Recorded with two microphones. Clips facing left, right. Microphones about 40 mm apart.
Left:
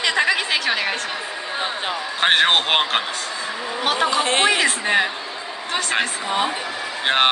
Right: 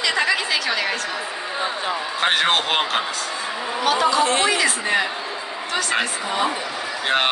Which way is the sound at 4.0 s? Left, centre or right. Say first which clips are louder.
Left 1 dB; left.